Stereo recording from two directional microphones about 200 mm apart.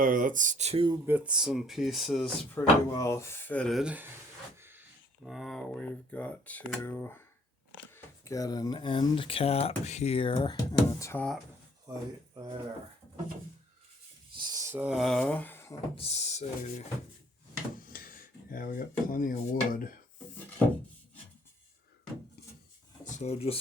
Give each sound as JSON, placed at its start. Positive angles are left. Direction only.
{"t": 0.0, "sound": "speech", "side_deg": -45}
{"t": 0.9, "sound": "speech", "side_deg": -10}
{"t": 2.6, "sound": "speech", "side_deg": 15}
{"t": 5.2, "sound": "speech", "side_deg": 0}
{"t": 11.9, "sound": "speech", "side_deg": -20}
{"t": 14.3, "sound": "speech", "side_deg": -15}
{"t": 16.0, "sound": "speech", "side_deg": 35}
{"t": 17.9, "sound": "speech", "side_deg": 45}
{"t": 23.0, "sound": "speech", "side_deg": 35}